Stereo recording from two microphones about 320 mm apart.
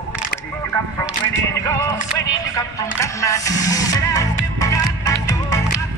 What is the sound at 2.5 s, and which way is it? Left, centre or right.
Music, centre.